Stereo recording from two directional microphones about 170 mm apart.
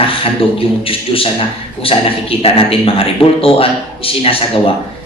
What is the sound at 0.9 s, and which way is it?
A man's voice, 35° left (ahead or behind).